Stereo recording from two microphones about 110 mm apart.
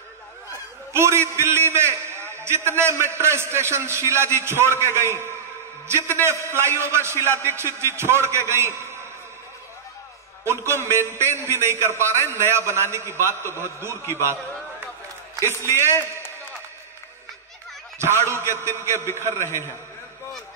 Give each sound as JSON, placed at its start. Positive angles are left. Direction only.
{"t": 0.9, "sound": "a man's voice", "side_deg": -25}
{"t": 10.4, "sound": "a man's voice", "side_deg": -25}
{"t": 14.2, "sound": "a sound", "side_deg": -25}
{"t": 17.9, "sound": "a man's voice", "side_deg": -25}